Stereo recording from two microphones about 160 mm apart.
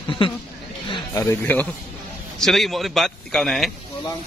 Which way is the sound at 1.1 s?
20° left (ahead or behind).